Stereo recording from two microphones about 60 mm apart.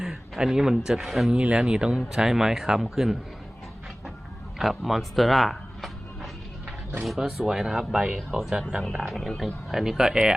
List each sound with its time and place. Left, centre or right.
0.0 s speech: centre
1.3 s speech: centre
4.5 s speech: centre
7.0 s speech: centre
8.8 s speech: centre